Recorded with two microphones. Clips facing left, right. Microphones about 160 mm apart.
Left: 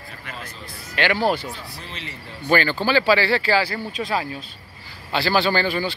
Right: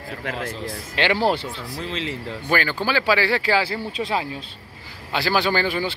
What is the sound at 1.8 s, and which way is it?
Speech, 90° right.